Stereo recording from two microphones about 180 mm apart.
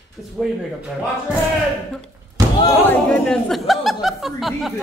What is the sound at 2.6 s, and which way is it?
Speech, 20° left (ahead or behind).